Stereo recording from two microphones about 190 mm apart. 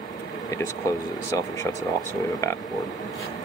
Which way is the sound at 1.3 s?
15° left (ahead or behind).